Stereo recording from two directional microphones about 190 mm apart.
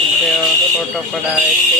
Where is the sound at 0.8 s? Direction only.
Centre (ahead or behind).